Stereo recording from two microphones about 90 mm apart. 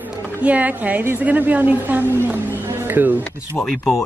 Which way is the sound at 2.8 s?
20° right (ahead or behind).